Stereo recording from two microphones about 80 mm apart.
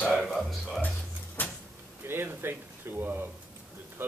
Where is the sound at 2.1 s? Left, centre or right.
Right.